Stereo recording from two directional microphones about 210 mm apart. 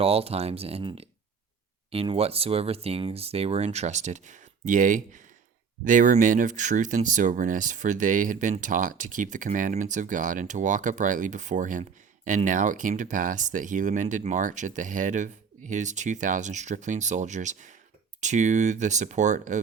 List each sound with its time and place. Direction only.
0.0 s speech: 30° right (ahead or behind)